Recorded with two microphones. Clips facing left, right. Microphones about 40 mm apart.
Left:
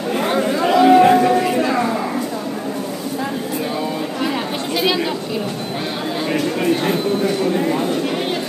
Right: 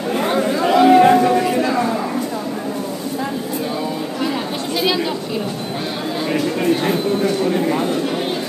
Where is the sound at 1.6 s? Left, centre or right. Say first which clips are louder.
Even; centre.